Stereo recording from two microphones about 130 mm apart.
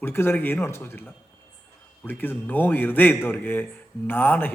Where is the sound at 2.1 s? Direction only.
15° left (ahead or behind).